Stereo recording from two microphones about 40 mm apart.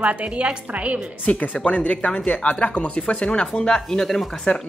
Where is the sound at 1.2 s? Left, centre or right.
Left.